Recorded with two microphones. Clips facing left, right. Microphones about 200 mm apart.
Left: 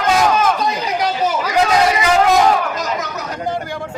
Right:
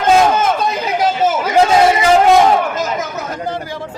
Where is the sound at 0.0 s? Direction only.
25° right (ahead or behind).